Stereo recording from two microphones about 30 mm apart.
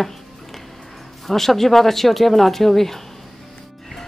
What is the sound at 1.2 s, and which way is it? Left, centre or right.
Speech, centre.